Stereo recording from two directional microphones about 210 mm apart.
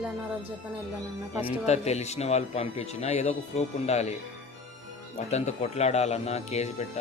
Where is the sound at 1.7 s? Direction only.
30° left (ahead or behind).